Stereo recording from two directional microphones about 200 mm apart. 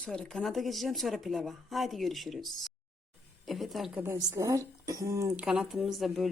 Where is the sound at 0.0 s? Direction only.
5° left (ahead or behind).